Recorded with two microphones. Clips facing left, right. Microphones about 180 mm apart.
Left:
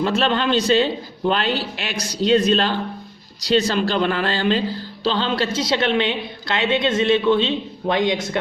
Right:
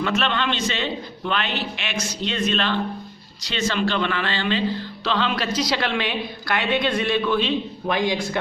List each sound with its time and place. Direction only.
0.0 s a man's voice: 35° left (ahead or behind)
5.0 s a woman's voice: 30° left (ahead or behind)